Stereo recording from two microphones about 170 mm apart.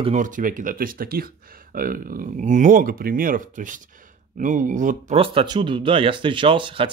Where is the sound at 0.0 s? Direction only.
45° right (ahead or behind).